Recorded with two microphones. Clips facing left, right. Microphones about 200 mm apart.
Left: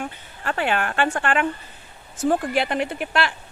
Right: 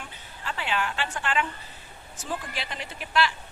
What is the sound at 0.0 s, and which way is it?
Speech, 55° left (ahead or behind).